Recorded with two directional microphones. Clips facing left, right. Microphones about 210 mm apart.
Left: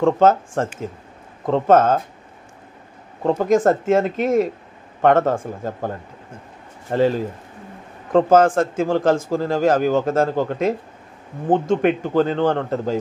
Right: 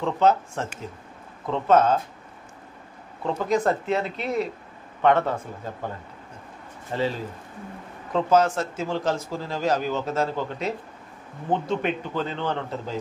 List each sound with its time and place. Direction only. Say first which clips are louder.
0.0 s speech: left 6 dB; 50° left (ahead or behind)
3.2 s speech: left 7 dB; 45° left (ahead or behind)